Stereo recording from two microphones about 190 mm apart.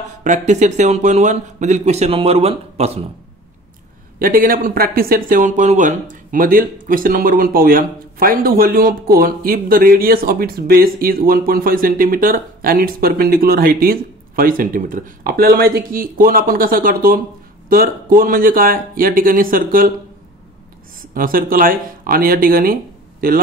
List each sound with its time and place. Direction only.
0.2 s speech: 40° right (ahead or behind)
4.2 s speech: 45° right (ahead or behind)
21.1 s speech: 50° right (ahead or behind)